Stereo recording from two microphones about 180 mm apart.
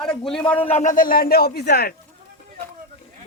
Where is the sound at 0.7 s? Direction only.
45° left (ahead or behind).